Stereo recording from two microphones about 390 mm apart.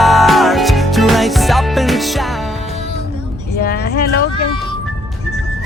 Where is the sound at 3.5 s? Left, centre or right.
Left.